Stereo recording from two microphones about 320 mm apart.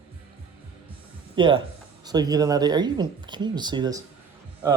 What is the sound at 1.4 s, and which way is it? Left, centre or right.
Speech, centre.